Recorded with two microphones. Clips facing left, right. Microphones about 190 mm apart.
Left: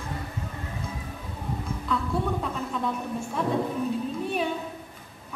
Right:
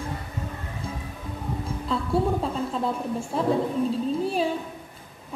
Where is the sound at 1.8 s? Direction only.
30° right (ahead or behind).